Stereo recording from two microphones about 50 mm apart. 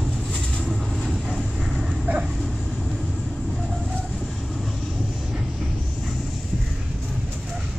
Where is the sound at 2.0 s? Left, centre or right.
Right.